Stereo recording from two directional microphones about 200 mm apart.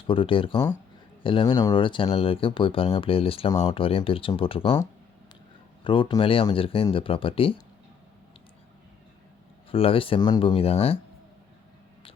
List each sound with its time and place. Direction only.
0.1 s speech: 25° left (ahead or behind)
5.8 s speech: 25° left (ahead or behind)
9.7 s speech: 30° left (ahead or behind)